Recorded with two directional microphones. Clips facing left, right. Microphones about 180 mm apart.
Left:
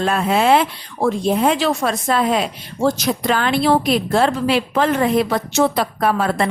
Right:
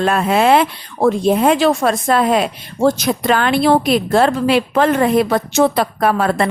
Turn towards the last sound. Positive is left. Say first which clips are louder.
# right 2 dB
turn(degrees=-60)  # may be behind; listen again after turning